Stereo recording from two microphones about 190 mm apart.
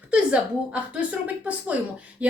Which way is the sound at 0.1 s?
5° right (ahead or behind).